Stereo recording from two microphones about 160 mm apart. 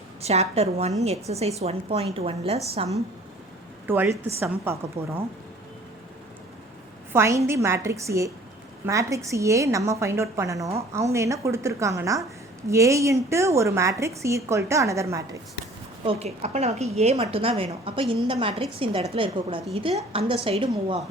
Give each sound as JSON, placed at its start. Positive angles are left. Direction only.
{"t": 0.2, "sound": "a woman's voice", "side_deg": -40}
{"t": 3.8, "sound": "a woman's voice", "side_deg": -15}
{"t": 7.1, "sound": "a woman's voice", "side_deg": -15}
{"t": 16.0, "sound": "a woman's voice", "side_deg": -45}